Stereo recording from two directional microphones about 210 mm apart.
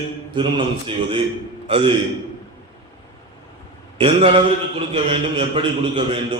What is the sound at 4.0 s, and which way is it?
A man's voice, 25° right (ahead or behind).